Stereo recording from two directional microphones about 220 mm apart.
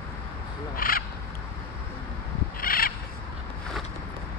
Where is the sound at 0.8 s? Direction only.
40° left (ahead or behind).